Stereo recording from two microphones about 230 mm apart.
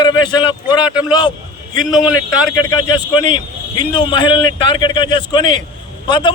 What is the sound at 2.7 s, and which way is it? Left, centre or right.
Speech, centre.